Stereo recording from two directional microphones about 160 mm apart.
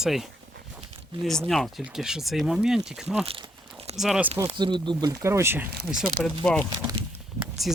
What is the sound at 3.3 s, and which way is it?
Speech, 30° right (ahead or behind).